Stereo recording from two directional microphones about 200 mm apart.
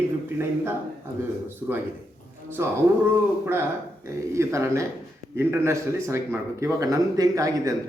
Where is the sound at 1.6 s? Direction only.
5° right (ahead or behind).